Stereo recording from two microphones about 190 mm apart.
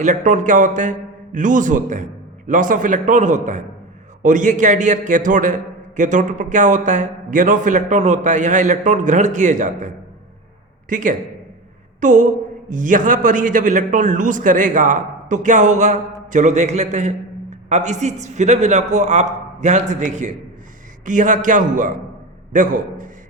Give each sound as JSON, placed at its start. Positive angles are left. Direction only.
{"t": 0.0, "sound": "a man's voice", "side_deg": -40}